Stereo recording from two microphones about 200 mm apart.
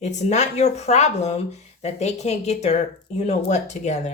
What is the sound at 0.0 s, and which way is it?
Speech, 35° left (ahead or behind).